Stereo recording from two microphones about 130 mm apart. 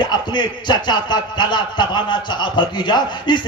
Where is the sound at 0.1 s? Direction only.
35° left (ahead or behind).